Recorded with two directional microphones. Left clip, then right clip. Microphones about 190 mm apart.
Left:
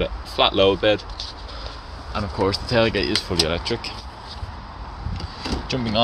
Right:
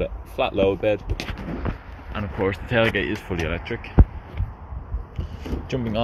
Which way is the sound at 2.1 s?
5° left (ahead or behind).